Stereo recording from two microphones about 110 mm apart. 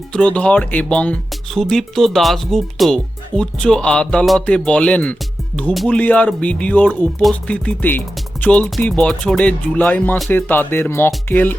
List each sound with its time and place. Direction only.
0.1 s speech: 10° left (ahead or behind)
5.7 s music: centre (ahead or behind)
6.0 s speech: 15° left (ahead or behind)